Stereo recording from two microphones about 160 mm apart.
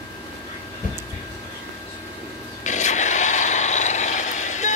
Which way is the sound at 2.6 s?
50° left (ahead or behind).